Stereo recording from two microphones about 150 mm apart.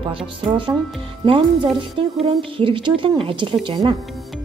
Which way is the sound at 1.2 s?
35° right (ahead or behind).